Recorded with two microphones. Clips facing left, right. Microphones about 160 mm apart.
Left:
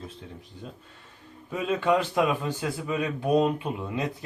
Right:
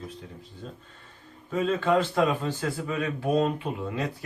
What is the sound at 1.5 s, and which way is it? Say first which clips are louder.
A man's voice: right 1 dB; 10° left (ahead or behind).